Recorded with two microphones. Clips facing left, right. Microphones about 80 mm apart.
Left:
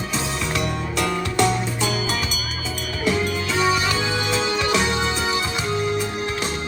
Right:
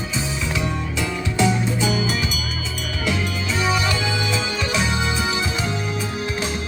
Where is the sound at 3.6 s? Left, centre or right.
Left.